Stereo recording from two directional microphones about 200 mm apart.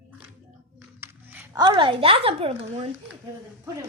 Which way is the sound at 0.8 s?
10° right (ahead or behind).